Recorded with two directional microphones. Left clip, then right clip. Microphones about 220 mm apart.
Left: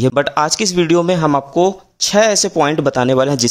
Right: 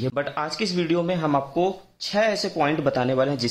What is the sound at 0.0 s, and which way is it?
Speech, 45° left (ahead or behind).